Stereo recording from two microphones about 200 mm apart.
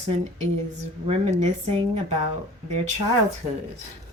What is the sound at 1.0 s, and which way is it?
Speech, 35° right (ahead or behind).